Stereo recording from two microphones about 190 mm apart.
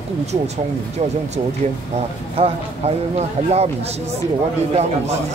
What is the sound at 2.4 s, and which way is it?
Speech, 35° right (ahead or behind).